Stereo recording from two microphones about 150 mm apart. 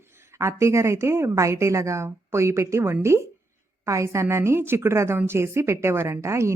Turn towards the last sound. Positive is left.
turn(degrees=-20)  # may be behind; listen again after turning